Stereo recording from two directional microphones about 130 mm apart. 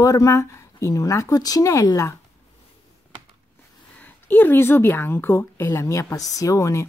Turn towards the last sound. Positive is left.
turn(degrees=25)  # may be behind; listen again after turning